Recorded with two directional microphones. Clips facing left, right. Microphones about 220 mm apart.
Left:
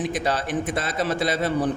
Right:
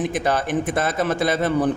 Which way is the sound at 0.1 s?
50° right (ahead or behind).